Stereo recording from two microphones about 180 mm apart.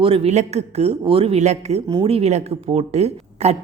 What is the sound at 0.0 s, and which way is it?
Speech, 30° right (ahead or behind).